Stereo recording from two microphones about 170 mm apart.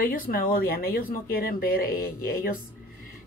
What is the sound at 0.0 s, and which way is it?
A woman's voice, 55° left (ahead or behind).